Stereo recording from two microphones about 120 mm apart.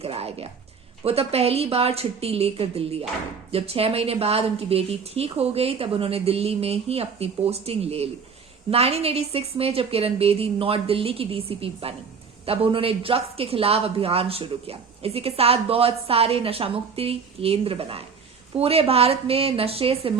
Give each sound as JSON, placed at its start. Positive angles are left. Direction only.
{"t": 0.0, "sound": "speech", "side_deg": -55}